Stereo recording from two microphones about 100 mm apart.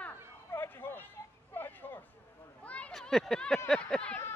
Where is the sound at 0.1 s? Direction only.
25° left (ahead or behind).